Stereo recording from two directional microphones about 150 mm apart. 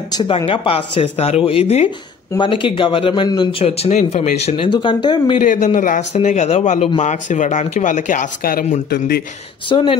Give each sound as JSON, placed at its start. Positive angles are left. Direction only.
{"t": 0.1, "sound": "speech", "side_deg": 30}
{"t": 2.3, "sound": "speech", "side_deg": 35}
{"t": 4.6, "sound": "speech", "side_deg": 30}
{"t": 5.4, "sound": "a man's voice", "side_deg": 55}
{"t": 9.7, "sound": "speech", "side_deg": 35}